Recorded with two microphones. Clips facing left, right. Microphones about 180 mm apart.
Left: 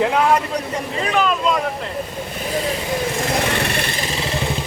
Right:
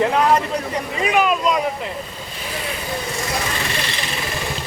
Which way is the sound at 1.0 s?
10° right (ahead or behind).